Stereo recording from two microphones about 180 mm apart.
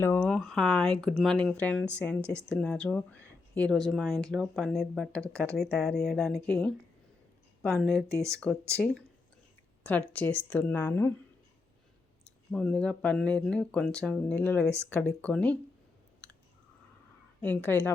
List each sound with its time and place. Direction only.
0.0 s speech: 10° left (ahead or behind)
8.1 s speech: 15° right (ahead or behind)
9.8 s speech: 10° left (ahead or behind)
12.5 s speech: 5° left (ahead or behind)
17.4 s speech: 10° left (ahead or behind)